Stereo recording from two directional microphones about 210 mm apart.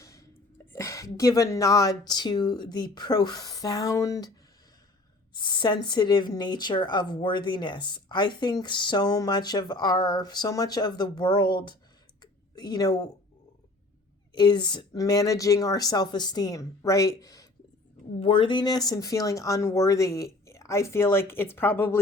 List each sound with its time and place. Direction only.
0.0 s speech: 15° left (ahead or behind)
5.3 s speech: 20° left (ahead or behind)
12.2 s a sound: 20° left (ahead or behind)
14.3 s a woman's voice: 20° left (ahead or behind)